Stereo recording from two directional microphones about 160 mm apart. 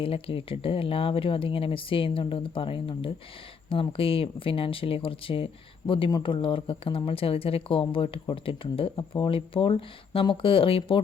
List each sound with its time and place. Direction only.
0.0 s speech: 35° left (ahead or behind)